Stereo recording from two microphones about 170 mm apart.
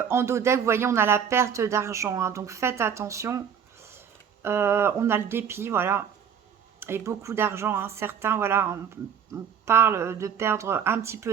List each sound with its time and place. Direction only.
0.1 s speech: 15° right (ahead or behind)
4.4 s speech: 15° right (ahead or behind)